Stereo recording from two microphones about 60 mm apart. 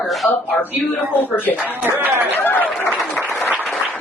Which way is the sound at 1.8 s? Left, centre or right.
Right.